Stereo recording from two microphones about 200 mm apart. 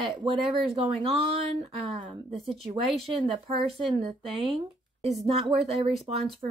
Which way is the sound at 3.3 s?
30° right (ahead or behind).